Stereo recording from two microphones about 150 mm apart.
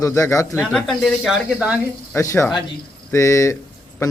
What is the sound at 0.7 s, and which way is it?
Speech, centre (ahead or behind).